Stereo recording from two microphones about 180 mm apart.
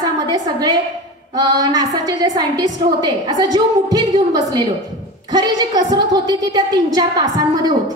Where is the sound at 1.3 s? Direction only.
20° right (ahead or behind).